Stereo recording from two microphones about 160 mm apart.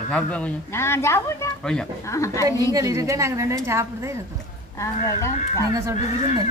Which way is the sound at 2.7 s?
20° right (ahead or behind).